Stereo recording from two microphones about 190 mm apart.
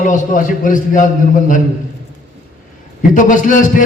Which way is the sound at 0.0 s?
40° left (ahead or behind).